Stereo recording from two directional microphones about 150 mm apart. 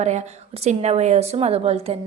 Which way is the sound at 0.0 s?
50° right (ahead or behind).